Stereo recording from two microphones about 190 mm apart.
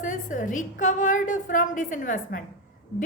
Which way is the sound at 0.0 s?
40° left (ahead or behind).